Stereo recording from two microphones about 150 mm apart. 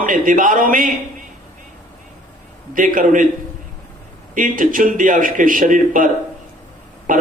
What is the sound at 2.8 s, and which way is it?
Speech, 65° right (ahead or behind).